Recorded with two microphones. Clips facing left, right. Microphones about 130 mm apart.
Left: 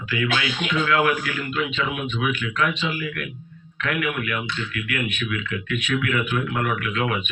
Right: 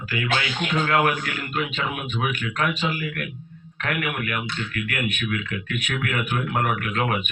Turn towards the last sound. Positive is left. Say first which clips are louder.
# even
turn(degrees=-40)  # may be behind; listen again after turning